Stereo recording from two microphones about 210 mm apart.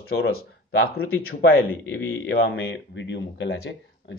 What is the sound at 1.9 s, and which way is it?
A man's voice, 65° left (ahead or behind).